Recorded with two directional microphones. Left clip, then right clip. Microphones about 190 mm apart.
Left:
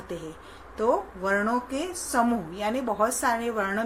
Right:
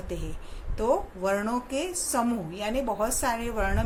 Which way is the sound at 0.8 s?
25° right (ahead or behind).